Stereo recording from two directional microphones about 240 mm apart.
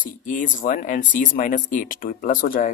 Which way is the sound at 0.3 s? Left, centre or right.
Left.